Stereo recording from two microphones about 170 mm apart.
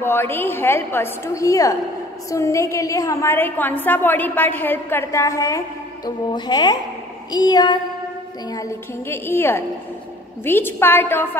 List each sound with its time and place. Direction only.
0.0 s a woman's voice: 15° left (ahead or behind)
6.0 s music: 25° left (ahead or behind)
9.1 s a woman's voice: 15° left (ahead or behind)